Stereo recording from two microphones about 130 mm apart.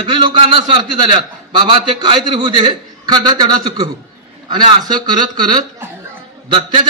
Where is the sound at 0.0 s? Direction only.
40° right (ahead or behind).